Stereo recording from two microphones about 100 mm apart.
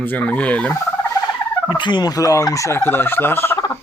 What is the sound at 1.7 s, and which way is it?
Fowl, 50° left (ahead or behind).